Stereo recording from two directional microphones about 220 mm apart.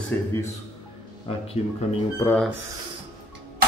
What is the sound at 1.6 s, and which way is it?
Speech, 30° left (ahead or behind).